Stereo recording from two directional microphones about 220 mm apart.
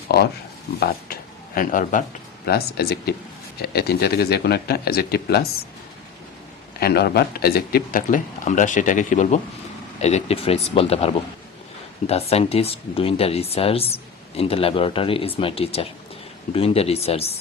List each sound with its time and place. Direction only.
0.1 s speech: 45° left (ahead or behind)
2.5 s speech: 45° left (ahead or behind)
6.7 s a man's voice: 45° left (ahead or behind); by 17.2 s 25° left (ahead or behind)